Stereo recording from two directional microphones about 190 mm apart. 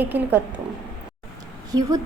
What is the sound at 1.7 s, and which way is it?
Speech, 20° right (ahead or behind).